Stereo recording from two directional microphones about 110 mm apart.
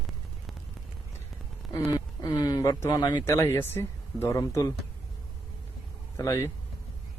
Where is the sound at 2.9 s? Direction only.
40° left (ahead or behind).